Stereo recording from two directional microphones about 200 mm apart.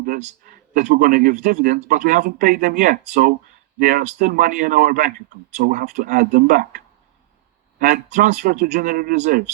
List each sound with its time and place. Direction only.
0.0 s speech: 45° right (ahead or behind)